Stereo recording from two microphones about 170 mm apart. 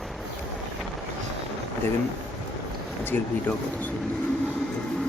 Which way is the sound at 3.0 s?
10° left (ahead or behind).